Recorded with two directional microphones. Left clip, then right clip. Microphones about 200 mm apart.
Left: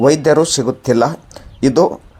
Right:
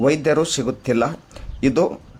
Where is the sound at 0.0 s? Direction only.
10° left (ahead or behind).